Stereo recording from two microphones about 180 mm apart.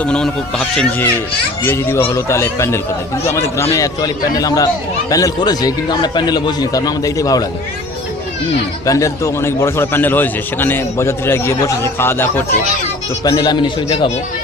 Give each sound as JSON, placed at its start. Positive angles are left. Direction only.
{"t": 0.0, "sound": "a man's voice", "side_deg": 5}
{"t": 8.9, "sound": "a man's voice", "side_deg": 15}